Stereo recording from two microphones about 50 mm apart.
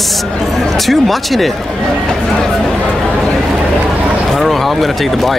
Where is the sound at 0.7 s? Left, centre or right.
Centre.